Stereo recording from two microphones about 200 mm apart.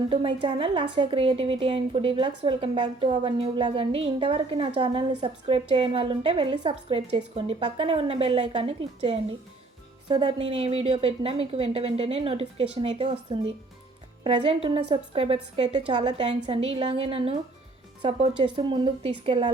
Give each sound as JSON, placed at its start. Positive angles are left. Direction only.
{"t": 0.1, "sound": "a woman's voice", "side_deg": -25}